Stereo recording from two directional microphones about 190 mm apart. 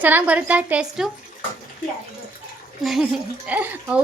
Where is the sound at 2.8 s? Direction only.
Centre (ahead or behind).